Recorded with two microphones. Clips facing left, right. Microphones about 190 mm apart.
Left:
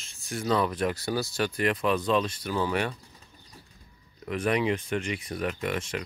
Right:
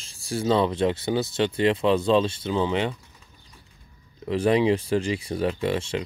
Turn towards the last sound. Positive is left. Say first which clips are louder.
# right 5 dB
turn(degrees=-30)  # may be behind; listen again after turning